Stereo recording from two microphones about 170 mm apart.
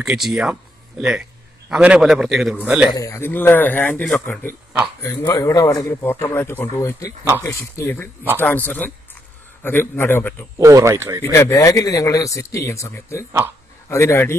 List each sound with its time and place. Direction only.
0.0 s a man's voice: 5° right (ahead or behind)
2.9 s a man's voice: 20° left (ahead or behind)
5.2 s a man's voice: 20° left (ahead or behind)
10.6 s speech: 20° right (ahead or behind)
11.3 s a man's voice: 15° left (ahead or behind)